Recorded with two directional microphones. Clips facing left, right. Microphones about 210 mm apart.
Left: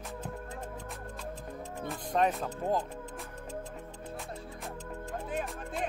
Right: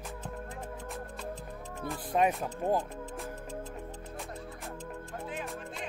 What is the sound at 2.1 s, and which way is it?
Speech, 10° right (ahead or behind).